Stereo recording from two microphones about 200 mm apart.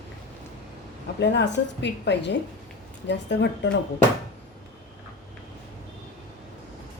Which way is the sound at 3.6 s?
60° left (ahead or behind).